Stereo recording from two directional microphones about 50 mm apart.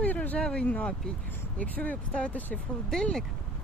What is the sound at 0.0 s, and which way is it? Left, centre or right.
Speech, left.